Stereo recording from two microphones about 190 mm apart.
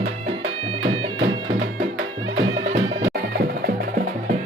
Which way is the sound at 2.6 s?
35° right (ahead or behind).